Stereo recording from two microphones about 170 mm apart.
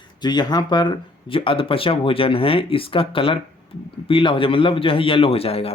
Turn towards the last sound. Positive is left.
turn(degrees=35)  # may be behind; listen again after turning